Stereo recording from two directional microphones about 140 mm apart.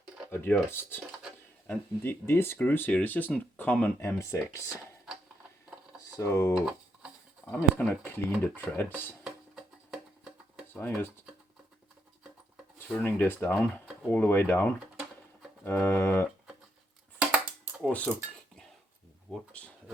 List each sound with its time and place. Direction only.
0.3 s speech: 15° left (ahead or behind)
6.1 s speech: 20° left (ahead or behind)
6.7 s tick-tock: 5° right (ahead or behind)
7.5 s speech: 10° left (ahead or behind)
9.9 s music: 5° right (ahead or behind)
10.8 s speech: 15° left (ahead or behind)
12.9 s speech: 10° left (ahead or behind)
17.2 s a sound: 10° right (ahead or behind)
17.8 s speech: 5° left (ahead or behind)
19.3 s speech: 10° left (ahead or behind)